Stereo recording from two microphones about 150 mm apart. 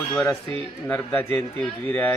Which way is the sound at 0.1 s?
10° left (ahead or behind).